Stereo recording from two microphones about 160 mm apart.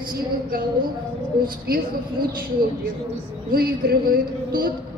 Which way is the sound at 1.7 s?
70° right (ahead or behind).